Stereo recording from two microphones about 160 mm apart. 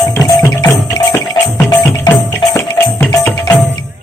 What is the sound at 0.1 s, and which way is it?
Music, 20° left (ahead or behind).